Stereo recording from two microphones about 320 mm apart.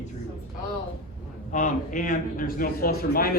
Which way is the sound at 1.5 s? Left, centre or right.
Left.